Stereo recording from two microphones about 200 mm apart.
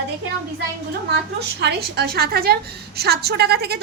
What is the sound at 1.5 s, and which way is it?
A woman's voice, 55° right (ahead or behind).